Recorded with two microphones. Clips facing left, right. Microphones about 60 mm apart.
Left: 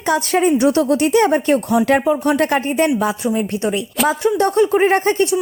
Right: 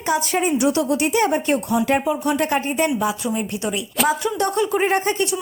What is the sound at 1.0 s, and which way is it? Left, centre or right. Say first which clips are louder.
Speech: left 5 dB; left.